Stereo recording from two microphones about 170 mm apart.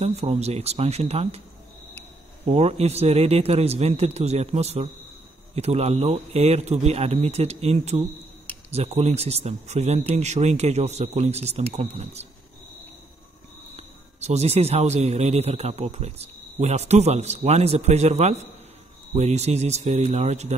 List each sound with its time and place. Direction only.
0.0 s speech: 40° right (ahead or behind)
2.4 s speech: 40° right (ahead or behind)
13.7 s speech: 40° right (ahead or behind)